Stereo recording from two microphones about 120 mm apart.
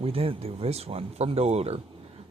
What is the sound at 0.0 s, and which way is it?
Speech, 55° right (ahead or behind).